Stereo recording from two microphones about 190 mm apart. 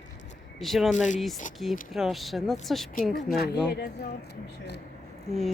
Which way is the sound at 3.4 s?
60° left (ahead or behind).